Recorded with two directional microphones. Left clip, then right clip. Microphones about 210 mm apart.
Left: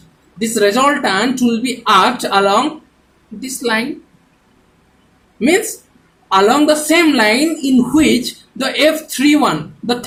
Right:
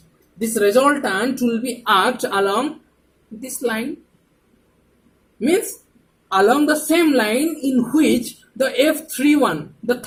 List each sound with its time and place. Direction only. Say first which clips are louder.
0.4 s speech: left 3 dB; 15° right (ahead or behind)
6.3 s speech: left 4 dB; 15° right (ahead or behind)